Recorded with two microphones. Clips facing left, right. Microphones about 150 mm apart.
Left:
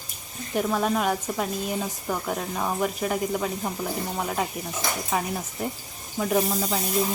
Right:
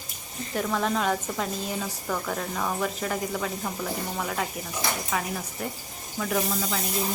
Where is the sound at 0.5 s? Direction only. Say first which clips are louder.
Left 3 dB; 15° left (ahead or behind).